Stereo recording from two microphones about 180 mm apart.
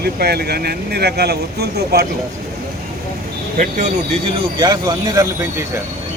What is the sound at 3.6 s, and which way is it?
Speech, 45° right (ahead or behind).